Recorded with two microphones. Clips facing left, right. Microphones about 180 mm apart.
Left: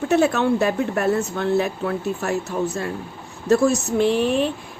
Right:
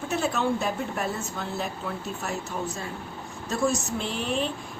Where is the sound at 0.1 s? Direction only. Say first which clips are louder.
Left 8 dB; 65° left (ahead or behind).